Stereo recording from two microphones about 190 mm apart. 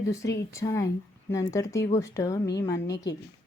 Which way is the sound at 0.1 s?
15° left (ahead or behind).